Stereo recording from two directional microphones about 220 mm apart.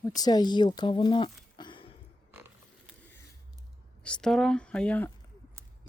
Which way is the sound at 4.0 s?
5° left (ahead or behind).